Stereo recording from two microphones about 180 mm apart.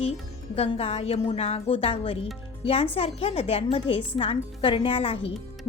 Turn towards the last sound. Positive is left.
turn(degrees=35)  # may be behind; listen again after turning